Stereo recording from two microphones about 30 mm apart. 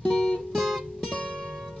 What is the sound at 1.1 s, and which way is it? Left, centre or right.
Music, left.